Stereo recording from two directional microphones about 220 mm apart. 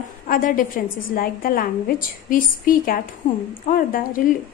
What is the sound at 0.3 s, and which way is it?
A woman's voice, 40° left (ahead or behind).